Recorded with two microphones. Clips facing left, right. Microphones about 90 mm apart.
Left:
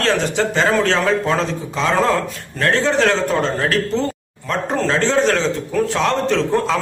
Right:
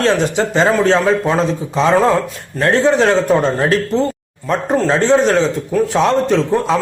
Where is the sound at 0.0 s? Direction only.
20° right (ahead or behind).